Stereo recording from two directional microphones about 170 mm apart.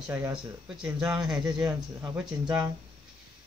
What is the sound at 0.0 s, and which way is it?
Speech, 5° right (ahead or behind).